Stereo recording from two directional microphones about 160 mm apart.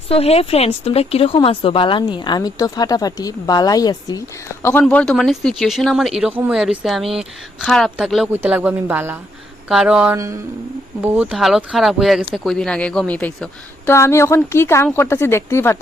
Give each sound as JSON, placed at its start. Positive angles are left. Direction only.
{"t": 0.1, "sound": "a woman's voice", "side_deg": 40}
{"t": 4.8, "sound": "speech", "side_deg": 5}
{"t": 10.2, "sound": "a sound", "side_deg": -20}
{"t": 11.0, "sound": "speech", "side_deg": -10}